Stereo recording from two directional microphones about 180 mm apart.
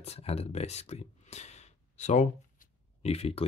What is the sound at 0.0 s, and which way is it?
Speech, 35° left (ahead or behind).